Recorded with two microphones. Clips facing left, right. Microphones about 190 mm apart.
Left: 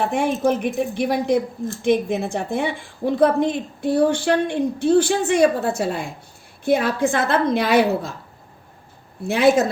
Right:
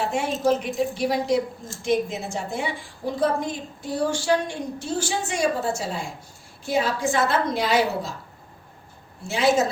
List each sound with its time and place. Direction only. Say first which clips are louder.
0.0 s a woman's voice: left 4 dB; 55° left (ahead or behind)
9.2 s a woman's voice: left 5 dB; 60° left (ahead or behind)